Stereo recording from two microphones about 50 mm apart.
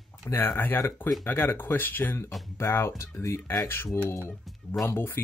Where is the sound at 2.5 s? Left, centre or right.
Left.